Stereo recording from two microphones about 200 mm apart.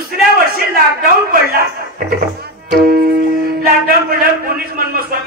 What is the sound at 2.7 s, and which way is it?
A man's voice, 50° right (ahead or behind).